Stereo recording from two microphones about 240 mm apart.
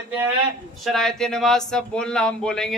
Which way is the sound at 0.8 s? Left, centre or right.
Centre.